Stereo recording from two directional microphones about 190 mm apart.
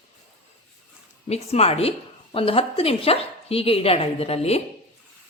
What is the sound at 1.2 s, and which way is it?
A woman's voice, 35° left (ahead or behind).